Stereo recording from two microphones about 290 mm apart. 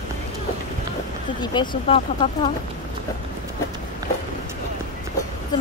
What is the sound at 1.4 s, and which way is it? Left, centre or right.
Speech, centre.